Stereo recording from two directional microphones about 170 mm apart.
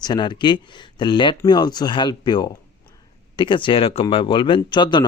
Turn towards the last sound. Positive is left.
turn(degrees=25)  # may be behind; listen again after turning